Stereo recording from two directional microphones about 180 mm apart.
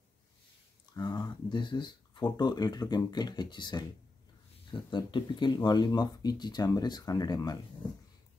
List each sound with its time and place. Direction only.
0.9 s speech: 20° left (ahead or behind)